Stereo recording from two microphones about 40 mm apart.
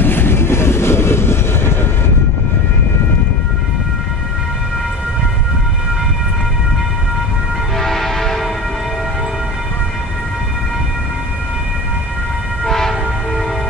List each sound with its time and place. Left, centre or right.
0.0 s train: left
7.7 s music: centre
12.6 s train horn: centre